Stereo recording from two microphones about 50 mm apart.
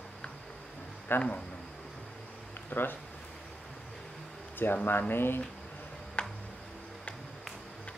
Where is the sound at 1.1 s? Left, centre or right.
Left.